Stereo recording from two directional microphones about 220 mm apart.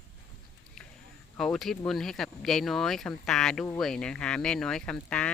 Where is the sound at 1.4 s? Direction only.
Centre (ahead or behind).